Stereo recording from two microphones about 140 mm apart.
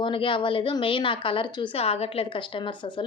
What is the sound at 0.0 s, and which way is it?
A woman's voice, 35° left (ahead or behind).